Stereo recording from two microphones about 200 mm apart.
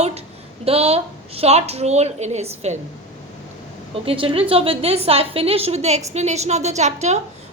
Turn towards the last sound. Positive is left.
turn(degrees=-35)  # may be behind; listen again after turning